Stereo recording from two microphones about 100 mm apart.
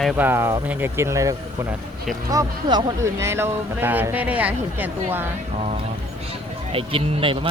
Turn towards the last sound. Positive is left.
turn(degrees=-60)  # may be behind; listen again after turning